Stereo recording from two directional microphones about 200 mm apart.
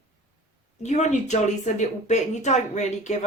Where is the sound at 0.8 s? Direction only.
35° left (ahead or behind).